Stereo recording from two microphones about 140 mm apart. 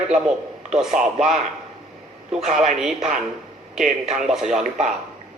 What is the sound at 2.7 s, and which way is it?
A man's voice, centre (ahead or behind).